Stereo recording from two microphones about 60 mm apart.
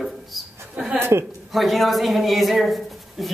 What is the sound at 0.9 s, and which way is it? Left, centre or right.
Speech, right.